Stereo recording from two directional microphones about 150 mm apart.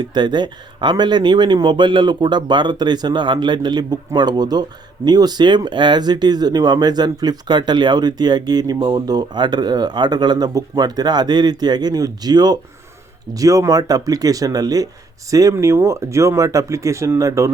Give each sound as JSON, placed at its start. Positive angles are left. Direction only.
{"t": 0.0, "sound": "speech", "side_deg": -30}